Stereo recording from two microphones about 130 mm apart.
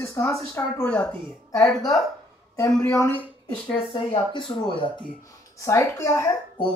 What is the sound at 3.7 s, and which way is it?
Speech, 45° left (ahead or behind).